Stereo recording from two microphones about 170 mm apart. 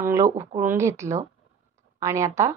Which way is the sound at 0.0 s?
15° right (ahead or behind).